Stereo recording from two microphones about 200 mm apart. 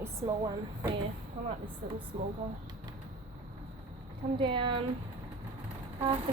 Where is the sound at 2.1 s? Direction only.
25° right (ahead or behind).